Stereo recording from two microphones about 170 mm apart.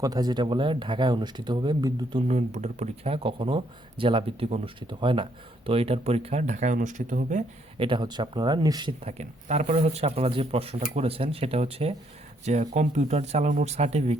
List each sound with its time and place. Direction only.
0.0 s speech: 25° right (ahead or behind)
2.2 s speech: 40° right (ahead or behind)
7.8 s speech: 30° right (ahead or behind)
9.0 s speech: 40° right (ahead or behind)